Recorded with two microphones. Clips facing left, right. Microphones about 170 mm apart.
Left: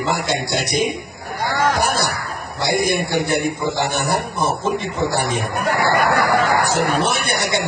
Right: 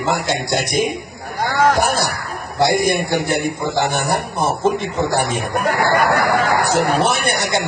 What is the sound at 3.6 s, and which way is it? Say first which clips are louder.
Speech: right 2 dB; 55° right (ahead or behind).